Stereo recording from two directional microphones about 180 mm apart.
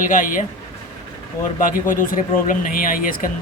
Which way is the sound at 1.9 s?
50° left (ahead or behind).